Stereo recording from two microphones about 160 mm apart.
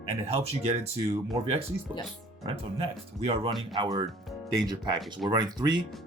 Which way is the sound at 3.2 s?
35° right (ahead or behind).